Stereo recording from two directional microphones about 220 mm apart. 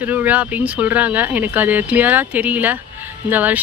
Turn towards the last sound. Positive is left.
turn(degrees=-10)  # may be behind; listen again after turning